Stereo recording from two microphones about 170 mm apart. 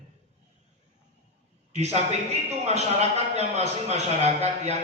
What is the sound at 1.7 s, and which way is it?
A man's voice, 40° right (ahead or behind).